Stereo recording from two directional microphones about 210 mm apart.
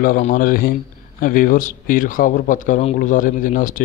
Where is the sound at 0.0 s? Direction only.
40° left (ahead or behind).